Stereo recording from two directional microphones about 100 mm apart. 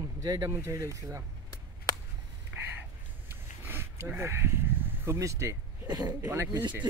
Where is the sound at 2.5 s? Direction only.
15° right (ahead or behind).